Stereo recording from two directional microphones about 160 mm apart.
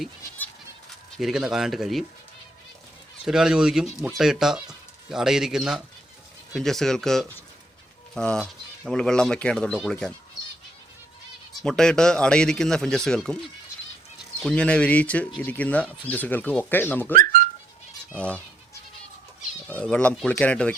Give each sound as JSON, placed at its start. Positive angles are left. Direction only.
{"t": 1.1, "sound": "speech", "side_deg": 0}
{"t": 3.2, "sound": "speech", "side_deg": -5}
{"t": 11.6, "sound": "speech", "side_deg": 5}
{"t": 14.4, "sound": "speech", "side_deg": 5}
{"t": 17.2, "sound": "whistling", "side_deg": -60}
{"t": 18.2, "sound": "speech", "side_deg": 5}
{"t": 19.6, "sound": "speech", "side_deg": 10}